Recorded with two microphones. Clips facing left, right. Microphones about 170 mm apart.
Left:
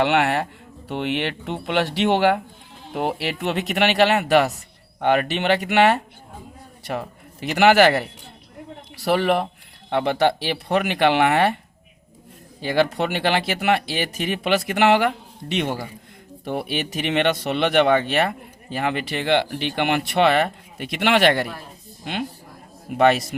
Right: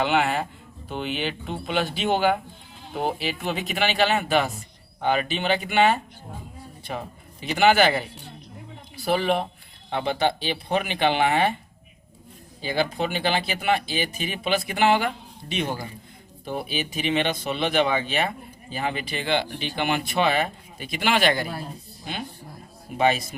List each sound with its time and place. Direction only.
0.0 s speech: 70° left (ahead or behind)
12.6 s speech: 70° left (ahead or behind)